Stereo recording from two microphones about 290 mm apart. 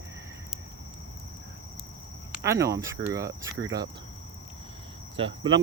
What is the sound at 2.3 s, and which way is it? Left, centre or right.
Speech, centre.